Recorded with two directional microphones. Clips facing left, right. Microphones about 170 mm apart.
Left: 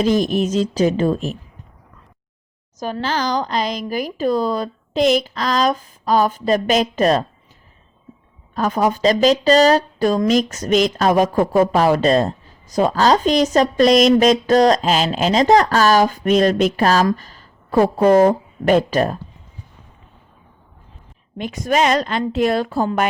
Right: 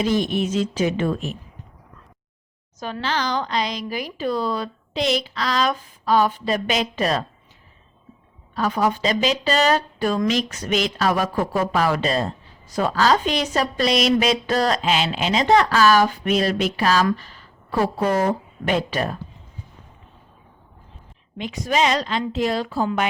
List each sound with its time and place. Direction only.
0.0 s speech: 40° left (ahead or behind)
2.7 s speech: 40° left (ahead or behind)
8.5 s a woman's voice: 45° left (ahead or behind)
21.3 s speech: 50° left (ahead or behind)